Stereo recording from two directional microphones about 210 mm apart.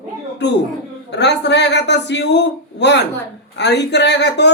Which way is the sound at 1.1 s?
55° left (ahead or behind).